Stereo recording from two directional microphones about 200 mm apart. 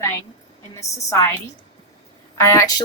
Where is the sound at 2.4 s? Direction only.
15° left (ahead or behind).